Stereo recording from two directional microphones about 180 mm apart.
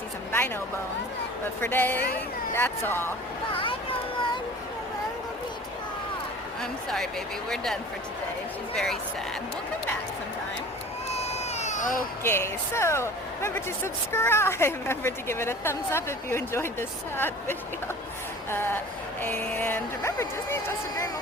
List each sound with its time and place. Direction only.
0.3 s a sound: 10° left (ahead or behind)
1.6 s speech: 10° left (ahead or behind)
3.5 s vehicle: 30° left (ahead or behind)
6.6 s speech: centre (ahead or behind)
11.1 s a sound: 35° left (ahead or behind)
12.2 s speech: 15° left (ahead or behind)